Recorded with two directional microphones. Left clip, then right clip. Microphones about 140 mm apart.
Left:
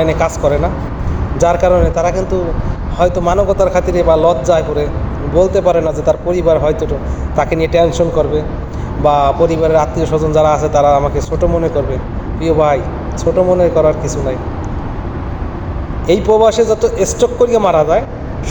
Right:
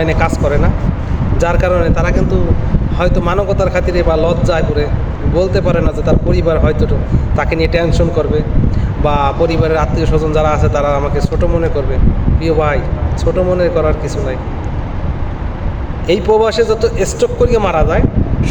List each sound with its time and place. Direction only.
0.0 s speech: 15° right (ahead or behind)
16.0 s speech: 15° right (ahead or behind)